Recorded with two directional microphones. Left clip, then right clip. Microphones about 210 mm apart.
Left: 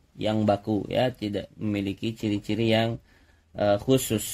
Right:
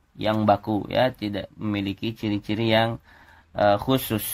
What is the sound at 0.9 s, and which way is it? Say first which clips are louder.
Speech: right 4 dB; 10° right (ahead or behind).